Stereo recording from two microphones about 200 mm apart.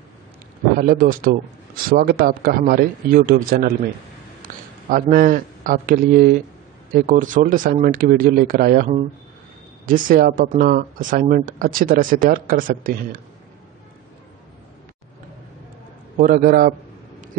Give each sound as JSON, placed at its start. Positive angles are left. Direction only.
{"t": 0.7, "sound": "speech", "side_deg": -45}
{"t": 4.4, "sound": "a sound", "side_deg": -45}
{"t": 5.1, "sound": "speech", "side_deg": -45}
{"t": 16.2, "sound": "speech", "side_deg": -45}